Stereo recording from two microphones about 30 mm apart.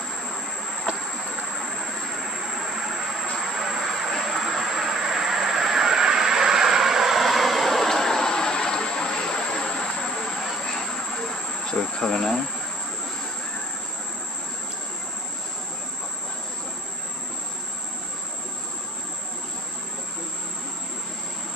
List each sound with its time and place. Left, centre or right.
2.7 s train: centre; by 10.1 s left
10.7 s insect: centre